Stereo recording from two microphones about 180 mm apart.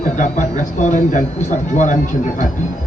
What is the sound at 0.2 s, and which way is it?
Speech, 40° left (ahead or behind).